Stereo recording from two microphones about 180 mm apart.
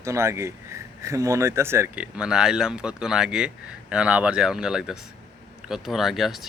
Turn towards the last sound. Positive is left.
turn(degrees=0)  # may be behind; listen again after turning